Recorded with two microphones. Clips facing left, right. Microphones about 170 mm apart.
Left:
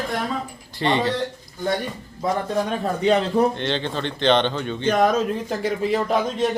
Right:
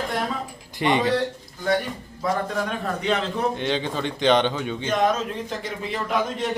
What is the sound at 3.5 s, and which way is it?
A man's voice, 5° right (ahead or behind).